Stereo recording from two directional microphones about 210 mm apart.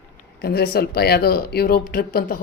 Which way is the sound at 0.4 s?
50° left (ahead or behind).